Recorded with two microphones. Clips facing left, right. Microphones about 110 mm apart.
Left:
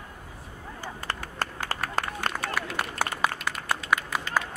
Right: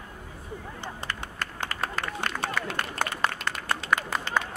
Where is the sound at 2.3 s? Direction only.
30° left (ahead or behind).